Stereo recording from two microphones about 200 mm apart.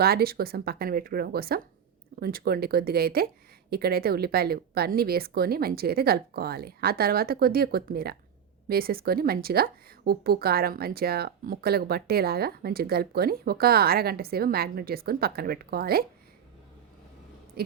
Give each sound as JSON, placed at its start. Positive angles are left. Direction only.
{"t": 0.0, "sound": "a woman's voice", "side_deg": -50}